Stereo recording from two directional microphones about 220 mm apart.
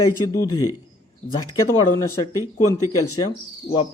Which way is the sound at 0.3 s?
15° left (ahead or behind).